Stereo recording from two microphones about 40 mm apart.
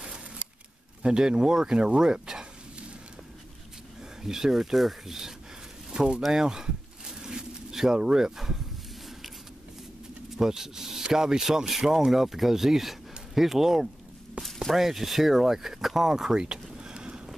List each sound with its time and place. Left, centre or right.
0.0 s scissors: right
1.0 s speech: centre
4.2 s speech: centre
5.9 s speech: right
6.3 s a sound: centre
10.3 s speech: centre
16.1 s a sound: centre